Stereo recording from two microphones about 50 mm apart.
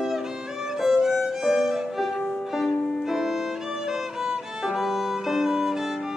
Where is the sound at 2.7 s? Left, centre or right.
Centre.